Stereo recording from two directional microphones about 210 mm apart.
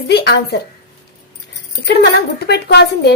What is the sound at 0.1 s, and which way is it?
Speech, 55° left (ahead or behind).